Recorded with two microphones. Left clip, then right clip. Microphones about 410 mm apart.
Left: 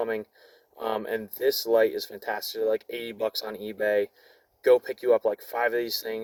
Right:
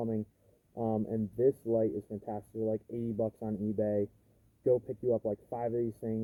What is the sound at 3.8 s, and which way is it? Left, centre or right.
Speech, left.